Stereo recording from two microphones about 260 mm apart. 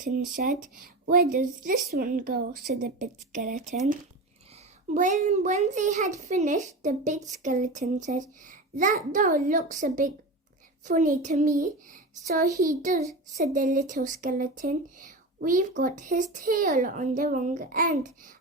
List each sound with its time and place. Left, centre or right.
0.3 s a woman's voice: right
4.9 s a child's voice: right